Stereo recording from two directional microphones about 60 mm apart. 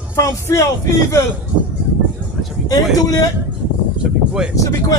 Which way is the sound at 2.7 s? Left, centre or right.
Left.